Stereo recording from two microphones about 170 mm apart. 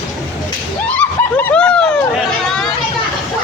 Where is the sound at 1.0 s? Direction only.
10° left (ahead or behind).